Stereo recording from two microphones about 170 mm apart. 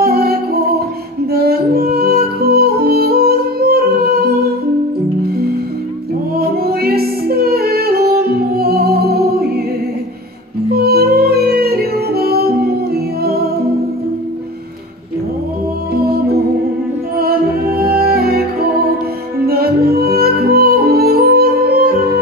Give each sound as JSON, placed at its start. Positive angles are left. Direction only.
{"t": 0.0, "sound": "music", "side_deg": -65}
{"t": 6.3, "sound": "music", "side_deg": -65}
{"t": 10.7, "sound": "music", "side_deg": -65}
{"t": 17.2, "sound": "music", "side_deg": -65}